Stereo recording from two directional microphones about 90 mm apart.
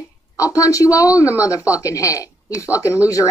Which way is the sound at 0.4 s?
35° left (ahead or behind).